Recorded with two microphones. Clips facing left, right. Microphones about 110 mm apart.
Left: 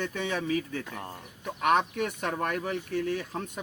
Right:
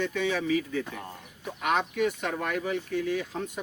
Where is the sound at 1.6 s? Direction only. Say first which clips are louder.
Left 1 dB; 45° left (ahead or behind).